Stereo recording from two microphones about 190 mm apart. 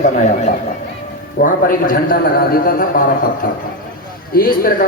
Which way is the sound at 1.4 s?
45° left (ahead or behind).